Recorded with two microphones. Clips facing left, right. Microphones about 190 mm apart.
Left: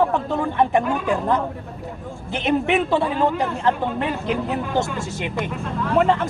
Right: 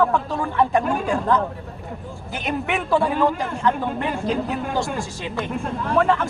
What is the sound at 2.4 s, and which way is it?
Speech, 20° left (ahead or behind).